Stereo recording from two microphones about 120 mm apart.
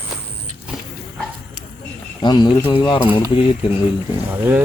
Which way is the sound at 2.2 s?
35° left (ahead or behind).